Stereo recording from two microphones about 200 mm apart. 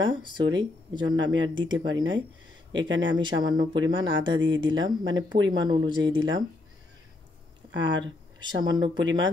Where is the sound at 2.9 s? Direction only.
65° right (ahead or behind).